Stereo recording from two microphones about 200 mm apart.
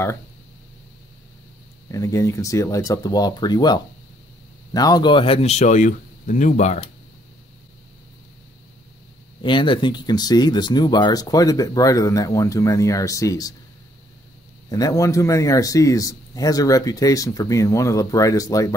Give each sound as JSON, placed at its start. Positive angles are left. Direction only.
{"t": 1.9, "sound": "speech", "side_deg": 15}
{"t": 9.4, "sound": "speech", "side_deg": 25}
{"t": 14.7, "sound": "speech", "side_deg": 15}